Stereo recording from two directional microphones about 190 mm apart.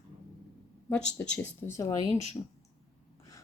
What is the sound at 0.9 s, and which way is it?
Speech, 10° left (ahead or behind).